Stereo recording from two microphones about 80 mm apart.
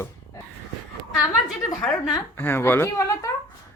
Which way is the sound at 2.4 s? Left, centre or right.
Left.